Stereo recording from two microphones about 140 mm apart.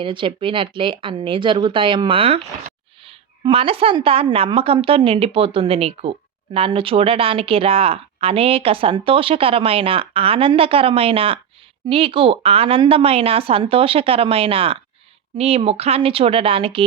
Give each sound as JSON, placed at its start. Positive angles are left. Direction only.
{"t": 0.0, "sound": "a woman's voice", "side_deg": -35}